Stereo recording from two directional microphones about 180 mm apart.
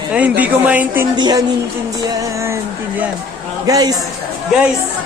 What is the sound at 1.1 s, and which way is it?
Speech, 25° right (ahead or behind).